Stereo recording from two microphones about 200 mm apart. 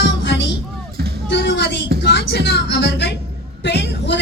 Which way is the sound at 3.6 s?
60° left (ahead or behind).